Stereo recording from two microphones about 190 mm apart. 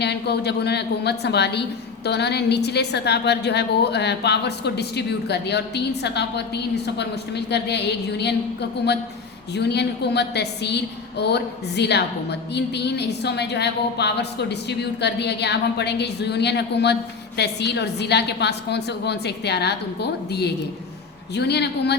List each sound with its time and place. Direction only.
0.0 s a woman's voice: 60° left (ahead or behind)
9.6 s a woman's voice: 60° left (ahead or behind)